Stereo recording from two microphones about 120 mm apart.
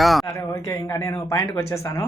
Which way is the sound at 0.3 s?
25° left (ahead or behind).